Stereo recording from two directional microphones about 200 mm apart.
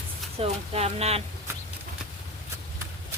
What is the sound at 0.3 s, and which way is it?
Speech, 30° right (ahead or behind).